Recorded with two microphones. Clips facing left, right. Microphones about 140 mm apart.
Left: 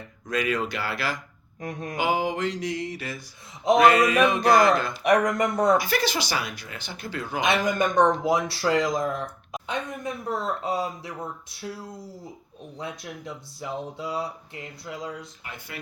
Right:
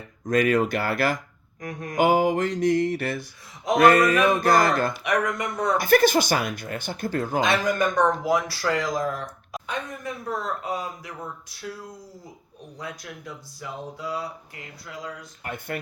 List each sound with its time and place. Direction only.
0.3 s speech: 50° right (ahead or behind)
1.6 s speech: 25° left (ahead or behind)
2.0 s speech: 50° right (ahead or behind)
5.1 s speech: 45° left (ahead or behind)
5.7 s speech: 50° right (ahead or behind)
7.6 s speech: 20° left (ahead or behind)
15.4 s speech: 50° right (ahead or behind)